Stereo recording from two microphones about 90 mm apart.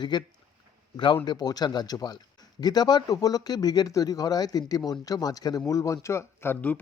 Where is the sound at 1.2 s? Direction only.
45° left (ahead or behind).